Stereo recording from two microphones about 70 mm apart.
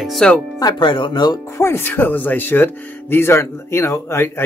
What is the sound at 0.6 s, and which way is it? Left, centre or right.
Speech, left.